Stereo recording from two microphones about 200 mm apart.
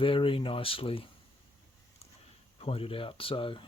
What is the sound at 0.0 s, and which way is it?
Speech, 25° left (ahead or behind).